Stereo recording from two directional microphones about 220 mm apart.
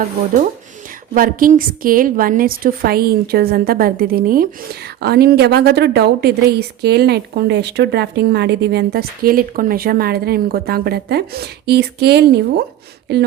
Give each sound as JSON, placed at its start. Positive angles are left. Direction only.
{"t": 1.1, "sound": "a woman's voice", "side_deg": -40}